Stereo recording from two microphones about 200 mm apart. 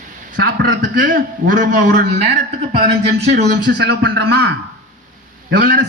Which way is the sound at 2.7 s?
25° right (ahead or behind).